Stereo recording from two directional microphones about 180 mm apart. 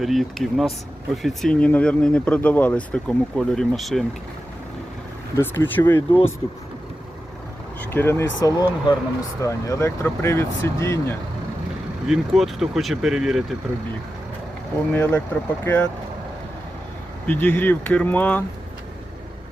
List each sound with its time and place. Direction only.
0.0 s speech: centre (ahead or behind)
5.4 s speech: 10° left (ahead or behind)
7.8 s speech: 10° left (ahead or behind)
12.0 s speech: centre (ahead or behind)
14.9 s speech: 10° left (ahead or behind)
17.2 s speech: 10° left (ahead or behind)